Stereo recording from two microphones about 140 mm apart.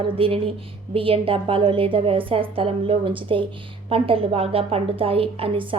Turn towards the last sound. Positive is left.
turn(degrees=-40)  # may be behind; listen again after turning